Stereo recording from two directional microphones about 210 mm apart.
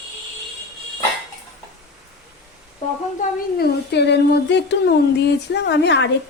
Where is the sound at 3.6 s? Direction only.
55° left (ahead or behind).